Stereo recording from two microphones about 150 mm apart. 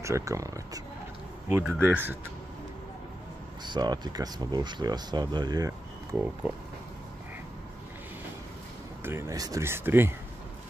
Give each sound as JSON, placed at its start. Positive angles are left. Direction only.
{"t": 0.0, "sound": "speech", "side_deg": -20}
{"t": 1.5, "sound": "speech", "side_deg": -10}
{"t": 3.6, "sound": "speech", "side_deg": -30}
{"t": 9.0, "sound": "speech", "side_deg": -20}